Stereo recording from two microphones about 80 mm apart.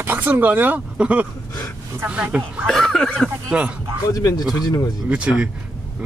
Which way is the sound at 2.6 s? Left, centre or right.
Centre.